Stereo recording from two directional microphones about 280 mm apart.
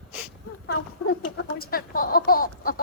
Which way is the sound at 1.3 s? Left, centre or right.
Left.